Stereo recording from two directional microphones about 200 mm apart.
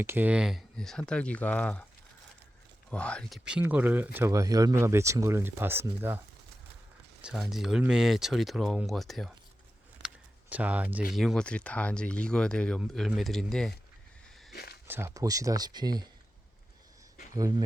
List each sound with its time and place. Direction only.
0.0 s speech: 10° right (ahead or behind); by 1.8 s 5° left (ahead or behind)
2.9 s speech: 5° left (ahead or behind)
10.5 s speech: 5° right (ahead or behind)
14.5 s a sound: 50° left (ahead or behind)
14.8 s speech: 10° right (ahead or behind)